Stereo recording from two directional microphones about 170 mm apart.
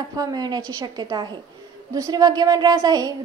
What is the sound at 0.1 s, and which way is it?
A woman's voice, 20° right (ahead or behind).